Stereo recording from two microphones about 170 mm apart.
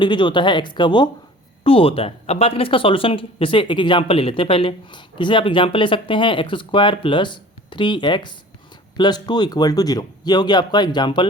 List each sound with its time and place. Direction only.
0.0 s speech: 30° left (ahead or behind)